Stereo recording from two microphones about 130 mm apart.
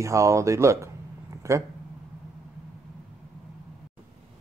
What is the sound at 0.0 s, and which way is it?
Speech, 25° right (ahead or behind).